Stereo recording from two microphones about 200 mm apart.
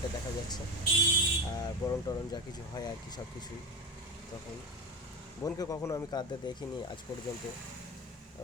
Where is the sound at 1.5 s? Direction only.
20° left (ahead or behind).